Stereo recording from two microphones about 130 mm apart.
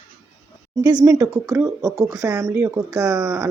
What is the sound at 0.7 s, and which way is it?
Speech, 30° right (ahead or behind).